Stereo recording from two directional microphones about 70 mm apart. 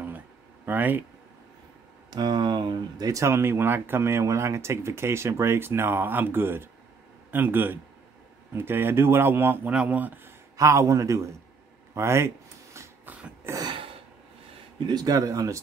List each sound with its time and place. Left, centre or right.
0.7 s speech: right
2.0 s speech: right
3.3 s speech: right
9.7 s speech: centre
10.6 s a man's voice: right
14.9 s speech: right